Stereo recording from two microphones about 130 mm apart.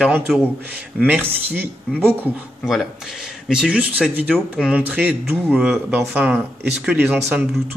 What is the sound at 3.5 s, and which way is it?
Speech, 10° right (ahead or behind).